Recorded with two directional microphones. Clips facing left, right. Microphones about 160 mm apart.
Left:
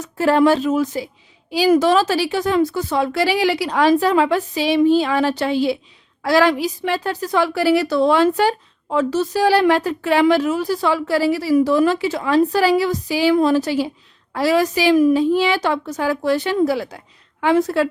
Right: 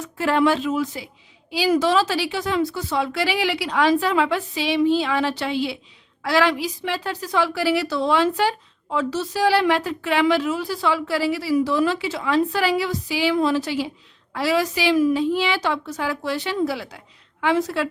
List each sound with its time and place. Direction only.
0.0 s a woman's voice: 40° left (ahead or behind)